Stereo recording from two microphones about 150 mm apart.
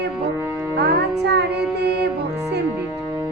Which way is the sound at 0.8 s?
90° right.